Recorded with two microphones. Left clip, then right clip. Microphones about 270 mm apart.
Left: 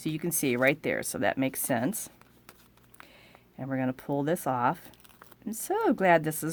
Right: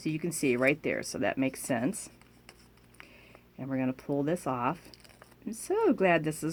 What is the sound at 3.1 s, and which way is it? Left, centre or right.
Speech, left.